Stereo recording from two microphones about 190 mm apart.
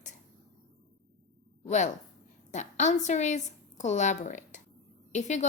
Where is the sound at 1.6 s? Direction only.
40° left (ahead or behind).